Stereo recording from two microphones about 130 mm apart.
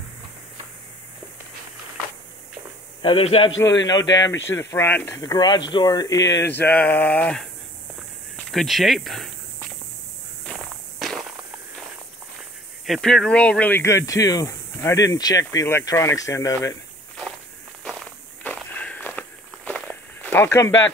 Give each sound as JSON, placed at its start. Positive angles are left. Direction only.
{"t": 3.0, "sound": "a man's voice", "side_deg": 45}
{"t": 3.8, "sound": "speech", "side_deg": 30}
{"t": 5.2, "sound": "speech", "side_deg": 30}
{"t": 6.4, "sound": "a sound", "side_deg": 15}
{"t": 8.5, "sound": "speech", "side_deg": 0}
{"t": 10.5, "sound": "walk", "side_deg": 0}
{"t": 12.8, "sound": "speech", "side_deg": 0}
{"t": 18.4, "sound": "walk", "side_deg": 10}